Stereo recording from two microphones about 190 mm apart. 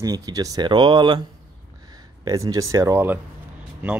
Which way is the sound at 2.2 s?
20° right (ahead or behind).